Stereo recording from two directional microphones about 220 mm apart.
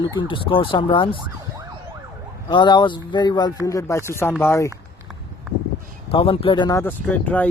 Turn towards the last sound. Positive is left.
turn(degrees=5)  # may be behind; listen again after turning